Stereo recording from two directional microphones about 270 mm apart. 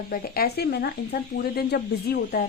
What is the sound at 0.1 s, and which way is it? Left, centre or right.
Speech, left.